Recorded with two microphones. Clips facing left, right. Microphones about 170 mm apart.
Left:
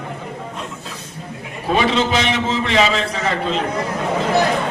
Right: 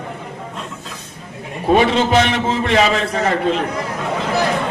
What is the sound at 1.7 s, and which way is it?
A man's voice, 50° right (ahead or behind).